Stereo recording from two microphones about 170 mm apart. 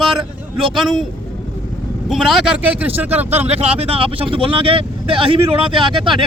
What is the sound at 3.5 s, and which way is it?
Speech, 35° right (ahead or behind).